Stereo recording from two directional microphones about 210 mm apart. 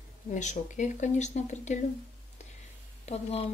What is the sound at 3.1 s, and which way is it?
Speech, 30° left (ahead or behind).